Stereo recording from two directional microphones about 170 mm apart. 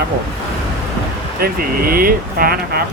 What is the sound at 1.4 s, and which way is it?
Speech, 60° right (ahead or behind).